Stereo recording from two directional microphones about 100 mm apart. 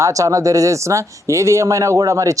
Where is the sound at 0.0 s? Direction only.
35° right (ahead or behind).